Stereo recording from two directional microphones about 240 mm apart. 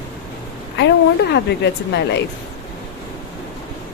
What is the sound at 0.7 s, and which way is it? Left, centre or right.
A woman's voice, left.